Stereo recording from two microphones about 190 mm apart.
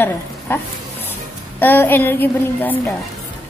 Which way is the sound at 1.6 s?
10° left (ahead or behind).